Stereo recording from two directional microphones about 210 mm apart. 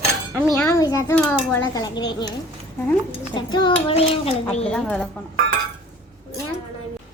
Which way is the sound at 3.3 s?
20° left (ahead or behind).